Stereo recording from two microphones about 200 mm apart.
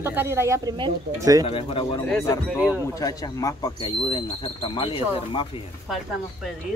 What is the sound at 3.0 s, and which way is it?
Speech, 15° left (ahead or behind).